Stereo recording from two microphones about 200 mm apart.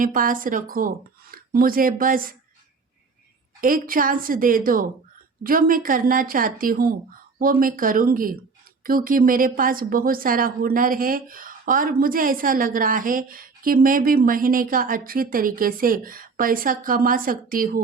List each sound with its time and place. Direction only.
0.0 s a woman's voice: 45° right (ahead or behind)
3.6 s a woman's voice: 45° right (ahead or behind)